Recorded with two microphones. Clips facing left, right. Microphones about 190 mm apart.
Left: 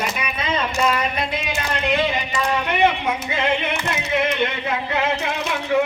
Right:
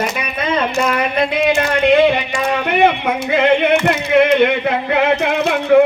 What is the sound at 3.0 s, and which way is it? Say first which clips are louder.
Music: right 8 dB; 60° right (ahead or behind).